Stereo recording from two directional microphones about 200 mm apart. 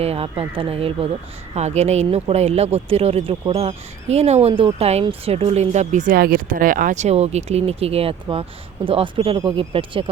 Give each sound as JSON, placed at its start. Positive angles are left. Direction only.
{"t": 0.0, "sound": "speech", "side_deg": -30}